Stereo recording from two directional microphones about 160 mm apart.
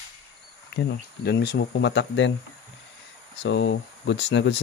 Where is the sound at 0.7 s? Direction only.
90° left.